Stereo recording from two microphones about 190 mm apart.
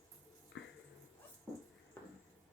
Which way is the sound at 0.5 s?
70° left (ahead or behind).